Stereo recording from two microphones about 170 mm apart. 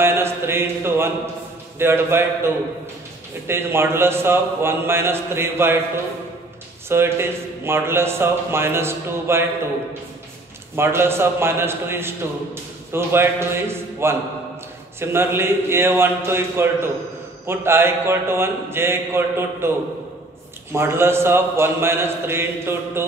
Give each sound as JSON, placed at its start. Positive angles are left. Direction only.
{"t": 0.0, "sound": "a sound", "side_deg": -15}
{"t": 1.8, "sound": "a man's voice", "side_deg": -15}
{"t": 6.9, "sound": "a man's voice", "side_deg": -15}
{"t": 10.8, "sound": "a man's voice", "side_deg": -15}
{"t": 20.7, "sound": "a man's voice", "side_deg": -15}